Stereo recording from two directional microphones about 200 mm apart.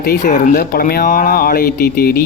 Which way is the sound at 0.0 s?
45° left (ahead or behind).